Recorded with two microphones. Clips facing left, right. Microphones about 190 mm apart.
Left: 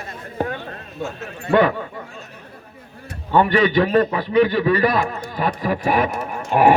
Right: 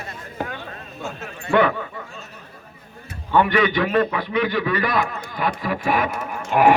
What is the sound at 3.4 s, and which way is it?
A man's voice, 35° left (ahead or behind).